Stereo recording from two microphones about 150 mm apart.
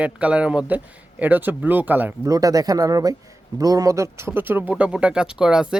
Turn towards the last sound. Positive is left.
turn(degrees=-5)  # may be behind; listen again after turning